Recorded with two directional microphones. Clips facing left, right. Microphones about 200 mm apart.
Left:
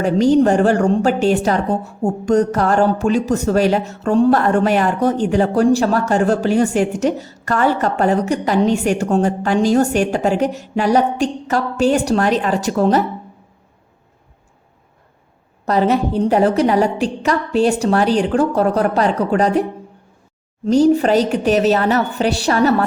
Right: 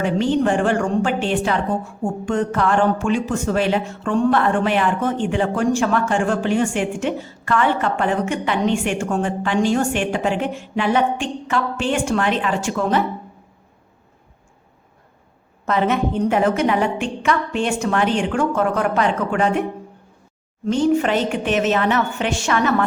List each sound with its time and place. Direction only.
0.0 s a woman's voice: 40° left (ahead or behind)
15.6 s a woman's voice: 35° left (ahead or behind)
20.7 s a woman's voice: 40° left (ahead or behind)